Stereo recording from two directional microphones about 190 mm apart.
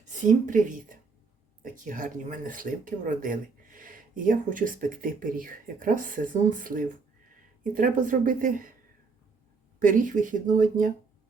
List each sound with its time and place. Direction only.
0.0 s a woman's voice: 40° right (ahead or behind)
9.8 s speech: 45° right (ahead or behind)